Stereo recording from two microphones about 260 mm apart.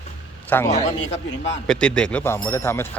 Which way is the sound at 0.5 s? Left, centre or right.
Centre.